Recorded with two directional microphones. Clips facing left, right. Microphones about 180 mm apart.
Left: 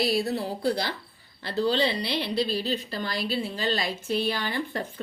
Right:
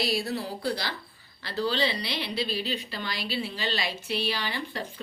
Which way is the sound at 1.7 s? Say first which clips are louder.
Left 3 dB; 50° left (ahead or behind).